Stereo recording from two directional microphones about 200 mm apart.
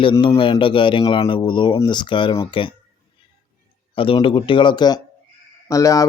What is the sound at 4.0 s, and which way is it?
Speech, 25° left (ahead or behind).